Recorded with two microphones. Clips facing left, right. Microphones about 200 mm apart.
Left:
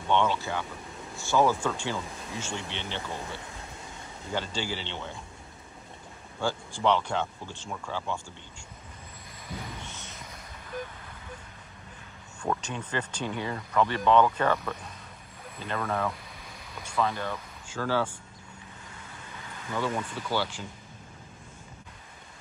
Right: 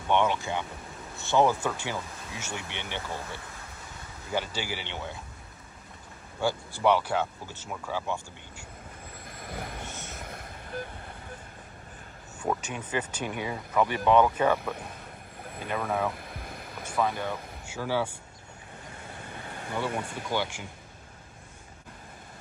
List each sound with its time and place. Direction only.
0.1 s speech: 15° right (ahead or behind)
4.3 s speech: 10° right (ahead or behind)
6.4 s speech: 10° right (ahead or behind)
9.3 s boat: 55° right (ahead or behind)
12.4 s speech: 10° right (ahead or behind)
16.2 s a sound: 55° right (ahead or behind)
16.9 s speech: 10° right (ahead or behind)
19.7 s speech: 15° right (ahead or behind)